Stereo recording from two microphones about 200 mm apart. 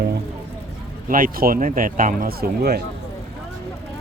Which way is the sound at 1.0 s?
45° right (ahead or behind).